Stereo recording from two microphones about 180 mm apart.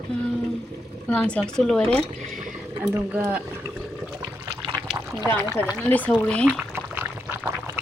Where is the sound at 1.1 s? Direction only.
5° left (ahead or behind).